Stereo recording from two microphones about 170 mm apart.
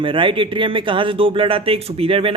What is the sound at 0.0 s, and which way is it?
Speech, 30° right (ahead or behind).